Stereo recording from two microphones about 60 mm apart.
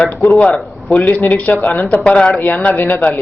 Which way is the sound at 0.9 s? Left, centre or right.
Left.